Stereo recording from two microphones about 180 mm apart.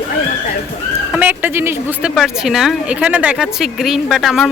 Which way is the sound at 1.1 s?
10° right (ahead or behind).